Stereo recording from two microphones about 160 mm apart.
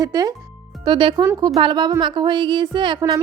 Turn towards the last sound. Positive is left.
turn(degrees=-30)  # may be behind; listen again after turning